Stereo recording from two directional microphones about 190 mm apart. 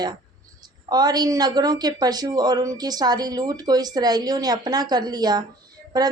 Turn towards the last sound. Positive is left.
turn(degrees=-20)  # may be behind; listen again after turning